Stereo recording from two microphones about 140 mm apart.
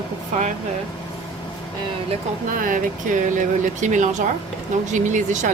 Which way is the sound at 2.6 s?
70° right (ahead or behind).